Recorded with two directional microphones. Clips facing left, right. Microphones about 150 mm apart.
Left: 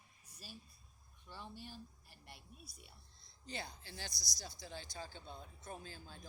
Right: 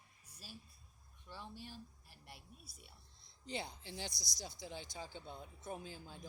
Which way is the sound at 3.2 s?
20° right (ahead or behind).